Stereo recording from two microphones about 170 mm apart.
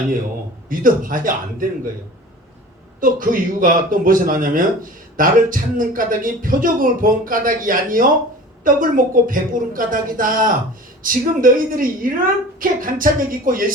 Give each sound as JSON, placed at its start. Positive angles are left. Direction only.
{"t": 0.7, "sound": "speech", "side_deg": -55}
{"t": 3.0, "sound": "speech", "side_deg": -55}